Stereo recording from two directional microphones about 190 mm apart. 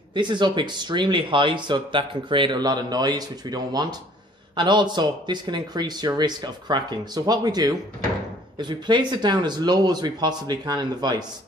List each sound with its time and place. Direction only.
0.1 s speech: 25° right (ahead or behind)